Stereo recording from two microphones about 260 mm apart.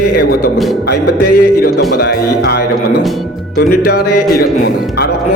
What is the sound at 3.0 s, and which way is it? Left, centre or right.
Speech, centre.